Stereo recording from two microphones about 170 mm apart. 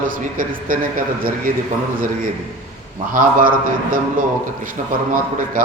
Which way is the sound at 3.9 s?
55° right (ahead or behind).